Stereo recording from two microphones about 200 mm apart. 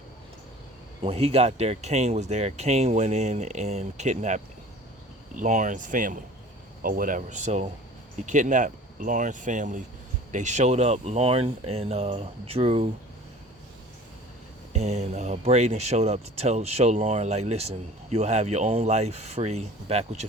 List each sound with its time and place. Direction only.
1.0 s speech: 30° right (ahead or behind)
14.7 s speech: 35° right (ahead or behind)